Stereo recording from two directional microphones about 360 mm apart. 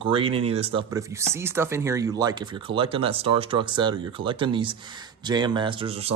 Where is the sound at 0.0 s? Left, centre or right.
Centre.